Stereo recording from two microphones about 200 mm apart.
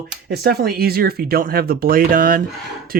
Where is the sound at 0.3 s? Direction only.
50° right (ahead or behind).